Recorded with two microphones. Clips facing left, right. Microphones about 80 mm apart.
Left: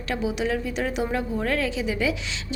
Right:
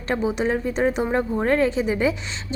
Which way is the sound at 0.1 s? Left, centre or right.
Right.